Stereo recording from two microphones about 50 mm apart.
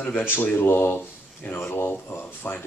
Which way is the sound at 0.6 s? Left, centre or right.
Left.